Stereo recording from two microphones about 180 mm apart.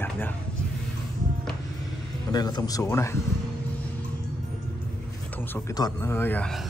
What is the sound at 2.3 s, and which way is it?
Speech, 20° left (ahead or behind).